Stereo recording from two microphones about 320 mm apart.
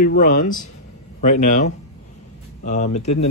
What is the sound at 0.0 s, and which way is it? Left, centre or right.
Speech, left.